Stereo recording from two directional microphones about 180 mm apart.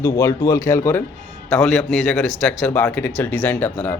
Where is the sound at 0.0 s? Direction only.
15° left (ahead or behind).